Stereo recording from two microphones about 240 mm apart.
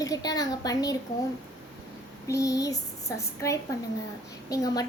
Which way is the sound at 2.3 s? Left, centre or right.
Centre.